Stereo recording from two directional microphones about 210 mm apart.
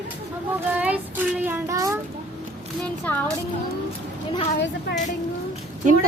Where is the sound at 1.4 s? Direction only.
10° right (ahead or behind).